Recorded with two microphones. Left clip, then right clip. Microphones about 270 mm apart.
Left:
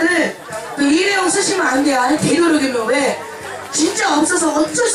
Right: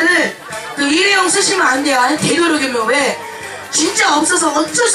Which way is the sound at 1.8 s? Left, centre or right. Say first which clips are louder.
Right 2 dB; centre.